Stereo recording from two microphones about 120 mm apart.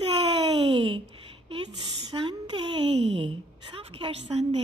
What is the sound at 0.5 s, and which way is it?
Speech, 45° right (ahead or behind).